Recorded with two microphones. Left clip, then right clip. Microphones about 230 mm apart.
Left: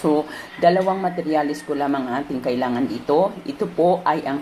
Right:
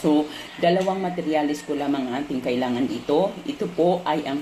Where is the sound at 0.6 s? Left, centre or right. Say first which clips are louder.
Left 4 dB; centre.